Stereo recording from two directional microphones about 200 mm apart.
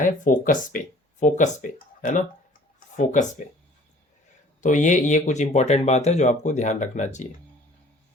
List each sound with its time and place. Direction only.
0.0 s speech: 40° left (ahead or behind)
4.6 s speech: 40° left (ahead or behind)